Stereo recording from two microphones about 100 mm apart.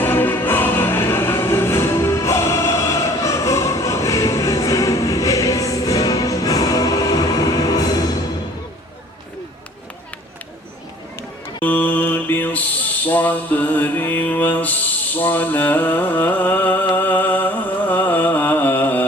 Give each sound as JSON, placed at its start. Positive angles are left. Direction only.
{"t": 0.0, "sound": "music", "side_deg": 20}
{"t": 11.6, "sound": "mantra", "side_deg": 15}
{"t": 13.1, "sound": "music", "side_deg": 20}